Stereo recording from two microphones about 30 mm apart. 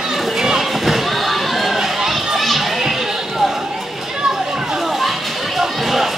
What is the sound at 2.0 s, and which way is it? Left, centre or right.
Children playing, centre.